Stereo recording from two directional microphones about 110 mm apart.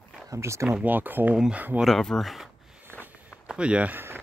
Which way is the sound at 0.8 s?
15° right (ahead or behind).